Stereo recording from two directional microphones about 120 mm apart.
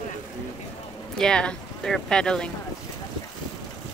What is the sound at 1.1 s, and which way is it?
Speech, 5° left (ahead or behind).